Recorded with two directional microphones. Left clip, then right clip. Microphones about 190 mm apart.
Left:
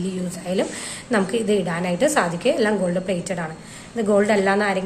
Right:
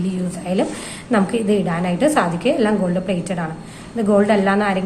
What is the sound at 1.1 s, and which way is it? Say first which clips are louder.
A woman's voice: right 2 dB; 15° left (ahead or behind).